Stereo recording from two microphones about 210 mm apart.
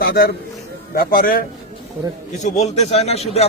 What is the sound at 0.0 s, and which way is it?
A man's voice, 45° left (ahead or behind).